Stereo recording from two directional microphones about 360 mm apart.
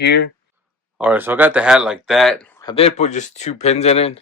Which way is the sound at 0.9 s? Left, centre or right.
Centre.